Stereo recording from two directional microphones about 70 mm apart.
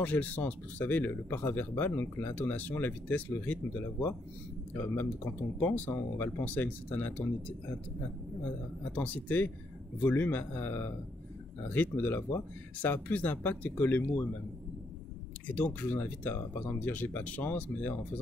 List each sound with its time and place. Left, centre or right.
0.0 s speech: left
4.7 s speech: left
8.9 s speech: left
15.4 s speech: left